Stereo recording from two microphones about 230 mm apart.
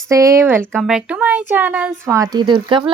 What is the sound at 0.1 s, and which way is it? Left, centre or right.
Speech, centre.